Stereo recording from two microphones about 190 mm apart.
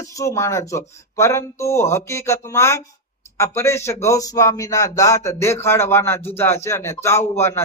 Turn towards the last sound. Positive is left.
turn(degrees=15)  # may be behind; listen again after turning